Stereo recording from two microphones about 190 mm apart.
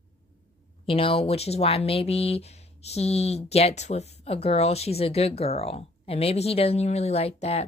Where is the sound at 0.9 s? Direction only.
30° left (ahead or behind).